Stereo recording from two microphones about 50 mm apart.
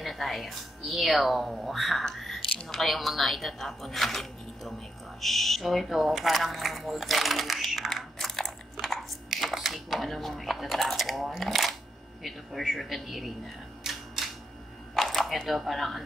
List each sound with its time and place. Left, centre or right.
0.0 s a woman's voice: centre
2.0 s a sound: centre
2.7 s a woman's voice: centre
8.8 s a sound: centre
12.2 s a woman's voice: centre
13.8 s typewriter: centre
15.0 s speech: centre